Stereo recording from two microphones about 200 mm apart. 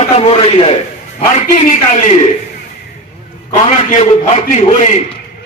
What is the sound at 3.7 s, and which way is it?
Speech, 35° left (ahead or behind).